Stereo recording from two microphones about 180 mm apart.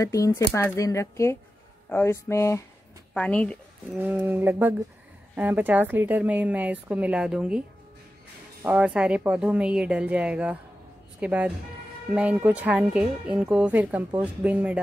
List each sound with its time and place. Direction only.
0.0 s speech: 20° left (ahead or behind)
4.0 s a woman's voice: 10° right (ahead or behind)
8.6 s a woman's voice: 5° right (ahead or behind)